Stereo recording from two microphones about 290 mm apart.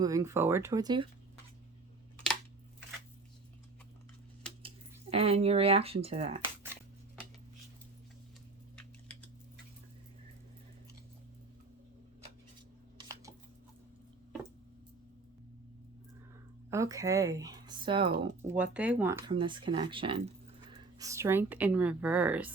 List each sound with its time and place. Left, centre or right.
0.0 s speech: centre
5.1 s speech: centre
8.7 s typing: centre
13.0 s a sound: centre
16.6 s speech: centre
18.5 s speech: centre